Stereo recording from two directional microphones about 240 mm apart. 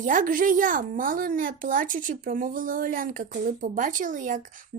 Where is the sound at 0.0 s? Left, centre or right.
Right.